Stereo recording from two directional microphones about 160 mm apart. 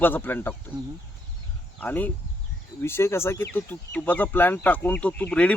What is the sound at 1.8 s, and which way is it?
Speech, 10° left (ahead or behind).